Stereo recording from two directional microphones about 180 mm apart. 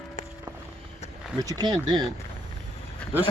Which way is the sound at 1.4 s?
20° right (ahead or behind).